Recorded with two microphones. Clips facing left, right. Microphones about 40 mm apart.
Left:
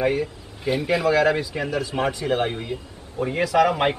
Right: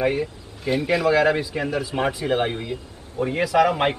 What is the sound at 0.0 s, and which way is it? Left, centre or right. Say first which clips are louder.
Speech: even; centre.